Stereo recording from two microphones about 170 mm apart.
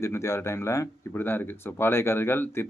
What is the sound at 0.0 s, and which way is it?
Speech, 15° left (ahead or behind).